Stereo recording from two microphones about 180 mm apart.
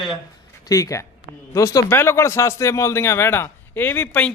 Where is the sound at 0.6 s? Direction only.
20° left (ahead or behind).